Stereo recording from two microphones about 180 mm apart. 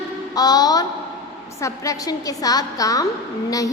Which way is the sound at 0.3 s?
20° left (ahead or behind).